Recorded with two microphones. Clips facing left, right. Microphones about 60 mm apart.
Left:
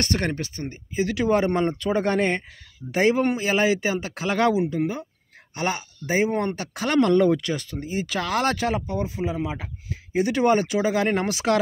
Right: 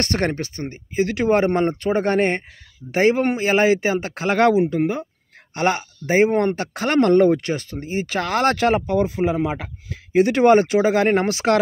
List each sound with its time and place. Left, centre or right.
0.0 s speech: right